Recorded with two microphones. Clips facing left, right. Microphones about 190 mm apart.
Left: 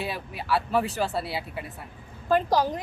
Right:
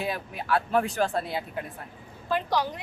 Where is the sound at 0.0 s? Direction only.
Centre (ahead or behind).